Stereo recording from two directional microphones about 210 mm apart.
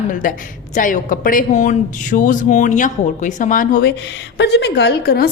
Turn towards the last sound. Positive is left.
turn(degrees=45)  # may be behind; listen again after turning